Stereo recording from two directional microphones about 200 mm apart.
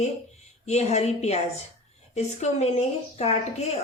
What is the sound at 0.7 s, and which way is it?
A woman's voice, 35° left (ahead or behind).